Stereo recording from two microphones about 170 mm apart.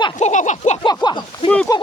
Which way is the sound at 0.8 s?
25° left (ahead or behind).